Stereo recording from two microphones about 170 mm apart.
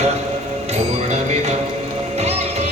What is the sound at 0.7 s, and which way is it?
Music, 40° right (ahead or behind).